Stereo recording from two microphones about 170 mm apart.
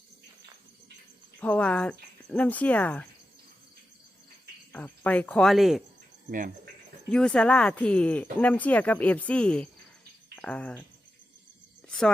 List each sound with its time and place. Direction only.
1.4 s speech: 10° left (ahead or behind)
4.7 s speech: 10° left (ahead or behind)
7.1 s speech: 5° left (ahead or behind)
11.9 s a sound: 5° left (ahead or behind)